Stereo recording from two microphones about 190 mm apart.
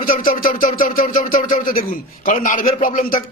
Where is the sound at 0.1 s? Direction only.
50° left (ahead or behind).